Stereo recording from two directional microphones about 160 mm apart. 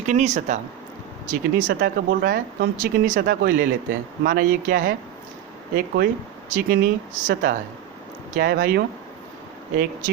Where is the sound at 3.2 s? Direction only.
70° right (ahead or behind).